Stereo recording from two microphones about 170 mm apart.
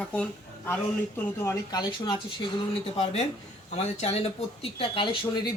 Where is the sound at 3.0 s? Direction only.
40° left (ahead or behind).